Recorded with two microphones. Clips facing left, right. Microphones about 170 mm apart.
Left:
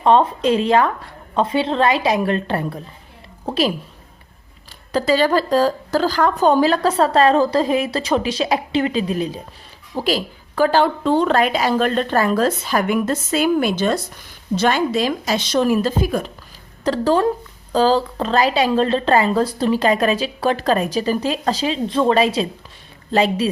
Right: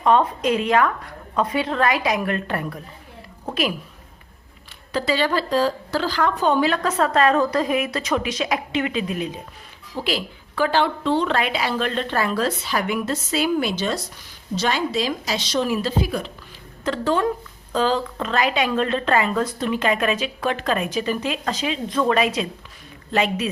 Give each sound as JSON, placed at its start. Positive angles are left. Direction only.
{"t": 0.0, "sound": "a woman's voice", "side_deg": 30}
{"t": 4.9, "sound": "a woman's voice", "side_deg": 40}
{"t": 16.8, "sound": "a woman's voice", "side_deg": 35}